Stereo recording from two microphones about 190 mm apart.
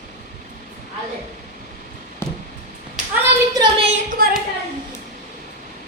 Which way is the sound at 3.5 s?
25° right (ahead or behind).